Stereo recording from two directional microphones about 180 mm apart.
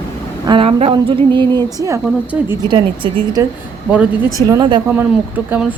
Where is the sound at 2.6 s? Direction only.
25° right (ahead or behind).